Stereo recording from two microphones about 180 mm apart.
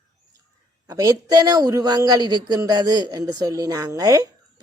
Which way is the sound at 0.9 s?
20° right (ahead or behind).